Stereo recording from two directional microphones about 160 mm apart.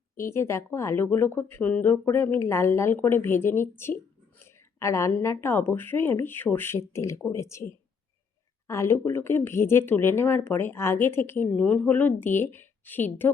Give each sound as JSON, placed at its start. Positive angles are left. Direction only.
{"t": 0.2, "sound": "speech", "side_deg": 15}